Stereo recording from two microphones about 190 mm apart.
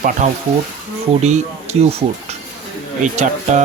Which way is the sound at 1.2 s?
35° right (ahead or behind).